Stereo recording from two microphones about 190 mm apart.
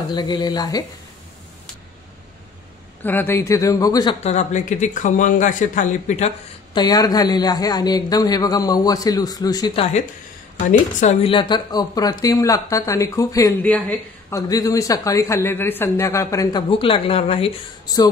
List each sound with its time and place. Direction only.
0.1 s a man's voice: 20° left (ahead or behind)
3.0 s speech: 10° left (ahead or behind)
4.2 s speech: 35° left (ahead or behind)
6.7 s a man's voice: 20° left (ahead or behind)
10.7 s speech: 40° left (ahead or behind)
11.3 s speech: 25° left (ahead or behind)
16.7 s a man's voice: 30° left (ahead or behind)